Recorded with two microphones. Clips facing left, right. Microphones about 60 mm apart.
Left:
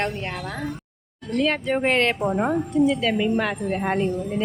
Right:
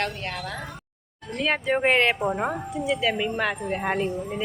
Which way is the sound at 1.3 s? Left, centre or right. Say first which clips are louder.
Left 2 dB; centre.